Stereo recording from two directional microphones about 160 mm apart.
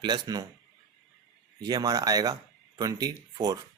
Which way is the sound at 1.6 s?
25° right (ahead or behind).